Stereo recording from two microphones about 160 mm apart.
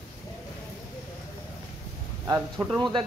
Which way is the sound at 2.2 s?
20° right (ahead or behind).